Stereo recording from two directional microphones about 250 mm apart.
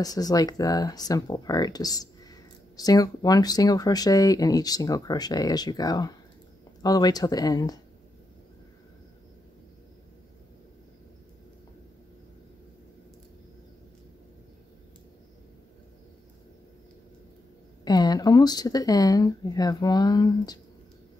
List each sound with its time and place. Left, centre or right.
0.0 s speech: centre
17.8 s speech: centre